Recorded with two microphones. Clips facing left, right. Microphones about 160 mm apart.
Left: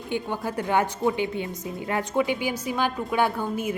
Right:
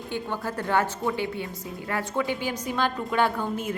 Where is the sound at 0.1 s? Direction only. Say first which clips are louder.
Left 3 dB; 15° left (ahead or behind).